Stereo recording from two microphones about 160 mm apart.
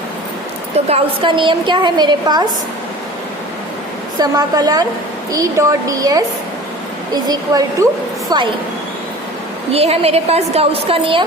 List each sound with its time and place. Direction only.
0.9 s a woman's voice: 35° right (ahead or behind)
4.2 s a woman's voice: 25° right (ahead or behind)
9.7 s a woman's voice: 40° right (ahead or behind)